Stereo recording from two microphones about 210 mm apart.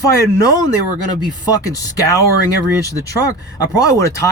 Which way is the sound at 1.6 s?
15° left (ahead or behind).